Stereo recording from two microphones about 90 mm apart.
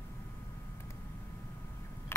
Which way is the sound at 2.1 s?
30° left (ahead or behind).